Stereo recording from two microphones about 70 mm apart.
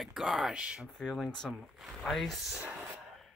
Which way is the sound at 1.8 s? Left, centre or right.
Centre.